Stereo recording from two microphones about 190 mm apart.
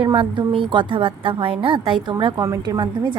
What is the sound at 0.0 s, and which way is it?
A woman's voice, 25° right (ahead or behind).